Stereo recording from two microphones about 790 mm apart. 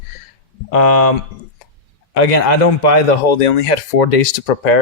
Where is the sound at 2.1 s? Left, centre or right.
Left.